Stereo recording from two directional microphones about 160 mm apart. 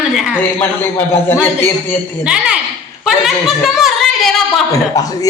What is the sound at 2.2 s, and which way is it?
A woman's voice, 5° right (ahead or behind).